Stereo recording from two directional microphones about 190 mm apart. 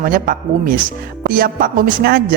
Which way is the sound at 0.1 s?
50° right (ahead or behind).